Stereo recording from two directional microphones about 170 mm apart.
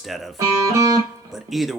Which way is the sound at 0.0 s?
Centre (ahead or behind).